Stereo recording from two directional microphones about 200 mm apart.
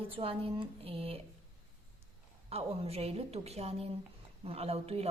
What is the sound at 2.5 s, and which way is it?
A woman's voice, 30° right (ahead or behind).